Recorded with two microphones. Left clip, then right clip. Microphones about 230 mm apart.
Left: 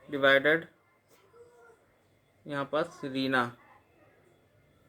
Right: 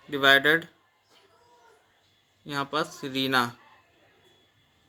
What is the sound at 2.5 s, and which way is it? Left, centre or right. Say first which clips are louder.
Speech: right 2 dB; right.